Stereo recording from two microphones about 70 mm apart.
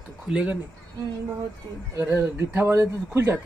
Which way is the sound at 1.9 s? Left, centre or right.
Right.